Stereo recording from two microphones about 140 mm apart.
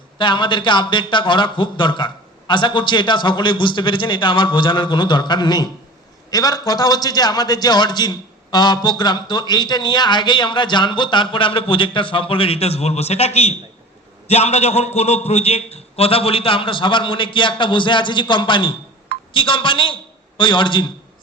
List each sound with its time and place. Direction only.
0.2 s a man's voice: 35° left (ahead or behind)